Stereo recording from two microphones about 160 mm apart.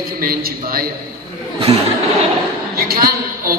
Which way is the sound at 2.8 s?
65° right (ahead or behind).